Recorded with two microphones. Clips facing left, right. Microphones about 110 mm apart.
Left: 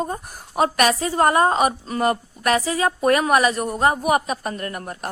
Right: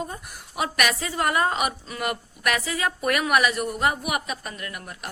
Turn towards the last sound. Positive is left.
turn(degrees=40)  # may be behind; listen again after turning